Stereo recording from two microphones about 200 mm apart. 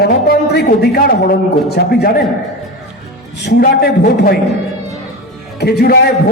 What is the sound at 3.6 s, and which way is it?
Speech, 50° left (ahead or behind).